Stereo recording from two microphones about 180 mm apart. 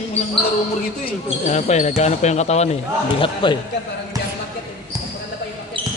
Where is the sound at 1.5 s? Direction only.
40° left (ahead or behind).